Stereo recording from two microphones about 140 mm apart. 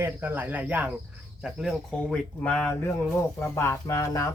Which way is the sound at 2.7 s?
15° left (ahead or behind).